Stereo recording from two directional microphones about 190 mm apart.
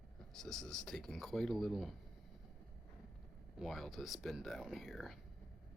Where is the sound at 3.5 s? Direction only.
Centre (ahead or behind).